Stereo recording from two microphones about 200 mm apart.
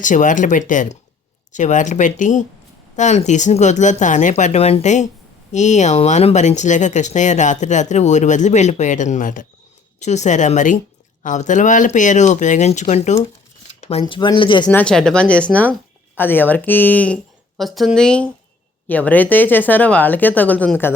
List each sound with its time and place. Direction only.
0.0 s speech: 40° left (ahead or behind)
14.0 s speech: 20° left (ahead or behind)
14.7 s speech: 5° left (ahead or behind)